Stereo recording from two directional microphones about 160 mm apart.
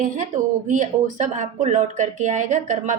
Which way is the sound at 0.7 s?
50° right (ahead or behind).